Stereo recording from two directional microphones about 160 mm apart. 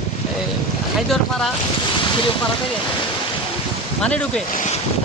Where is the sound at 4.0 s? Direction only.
5° left (ahead or behind).